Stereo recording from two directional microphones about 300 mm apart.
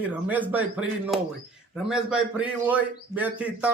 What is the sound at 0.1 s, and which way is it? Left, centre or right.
A man's voice, centre.